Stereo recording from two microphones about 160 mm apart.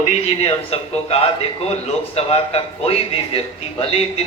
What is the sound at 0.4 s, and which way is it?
A man's voice, 40° left (ahead or behind).